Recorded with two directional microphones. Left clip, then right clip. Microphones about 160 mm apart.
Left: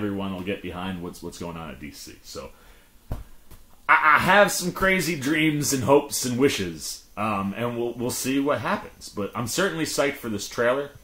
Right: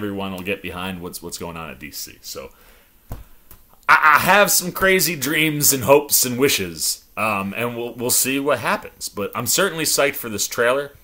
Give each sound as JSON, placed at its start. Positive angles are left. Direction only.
{"t": 0.0, "sound": "speech", "side_deg": -20}
{"t": 3.8, "sound": "speech", "side_deg": -25}